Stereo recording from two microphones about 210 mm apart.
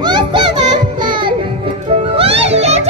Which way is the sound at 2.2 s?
30° right (ahead or behind).